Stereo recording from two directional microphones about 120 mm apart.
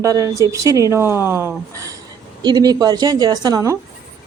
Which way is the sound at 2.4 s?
35° right (ahead or behind).